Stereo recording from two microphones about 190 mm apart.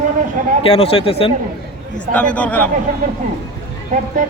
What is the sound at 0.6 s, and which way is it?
Speech, 30° left (ahead or behind).